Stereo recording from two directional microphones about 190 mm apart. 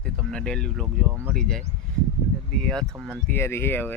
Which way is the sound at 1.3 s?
5° left (ahead or behind).